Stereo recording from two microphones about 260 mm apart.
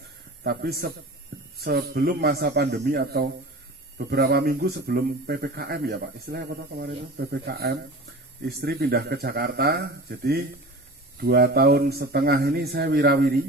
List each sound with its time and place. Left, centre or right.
0.4 s a man's voice: right